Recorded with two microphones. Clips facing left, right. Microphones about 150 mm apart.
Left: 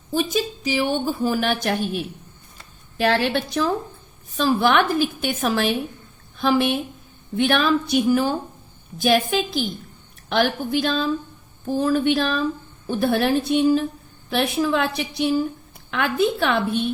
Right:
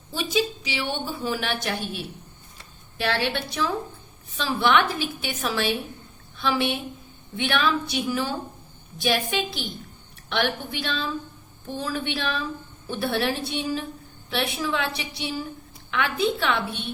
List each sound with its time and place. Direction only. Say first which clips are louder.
0.1 s a woman's voice: left 3 dB; 45° left (ahead or behind)